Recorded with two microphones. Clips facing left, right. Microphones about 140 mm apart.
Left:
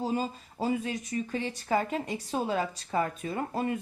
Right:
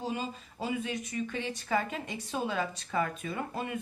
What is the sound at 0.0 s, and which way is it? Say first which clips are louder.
A woman's voice: left 5 dB; 35° left (ahead or behind).